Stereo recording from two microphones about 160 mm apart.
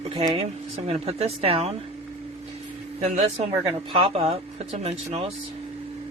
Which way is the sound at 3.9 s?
35° right (ahead or behind).